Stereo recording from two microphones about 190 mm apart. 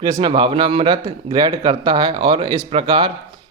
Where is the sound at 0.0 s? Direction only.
25° right (ahead or behind).